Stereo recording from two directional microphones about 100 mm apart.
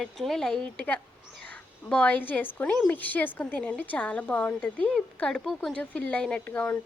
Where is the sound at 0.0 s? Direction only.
Centre (ahead or behind).